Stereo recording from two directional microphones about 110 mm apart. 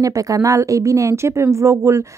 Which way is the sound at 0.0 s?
30° right (ahead or behind).